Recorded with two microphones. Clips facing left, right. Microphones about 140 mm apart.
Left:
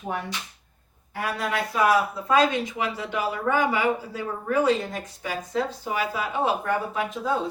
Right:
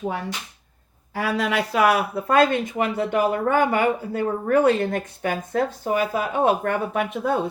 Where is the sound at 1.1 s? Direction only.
90° right; by 7.5 s 55° right (ahead or behind).